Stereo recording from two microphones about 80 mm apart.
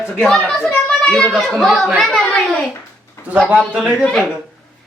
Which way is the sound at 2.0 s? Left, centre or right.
Centre.